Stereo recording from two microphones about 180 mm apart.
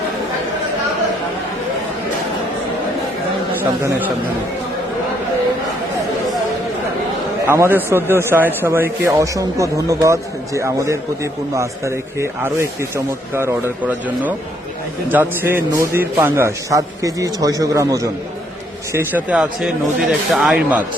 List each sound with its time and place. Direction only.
7.4 s a man's voice: 15° right (ahead or behind)